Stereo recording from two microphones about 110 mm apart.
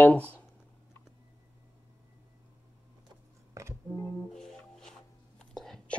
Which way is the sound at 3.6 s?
30° right (ahead or behind).